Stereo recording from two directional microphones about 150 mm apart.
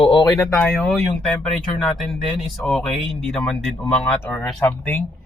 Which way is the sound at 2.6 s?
Centre (ahead or behind).